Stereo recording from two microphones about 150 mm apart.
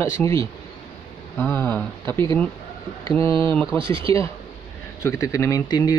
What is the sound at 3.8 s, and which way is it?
Speech, 35° right (ahead or behind).